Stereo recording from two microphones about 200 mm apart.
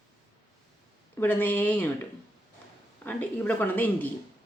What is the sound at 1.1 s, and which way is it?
Speech, 10° left (ahead or behind).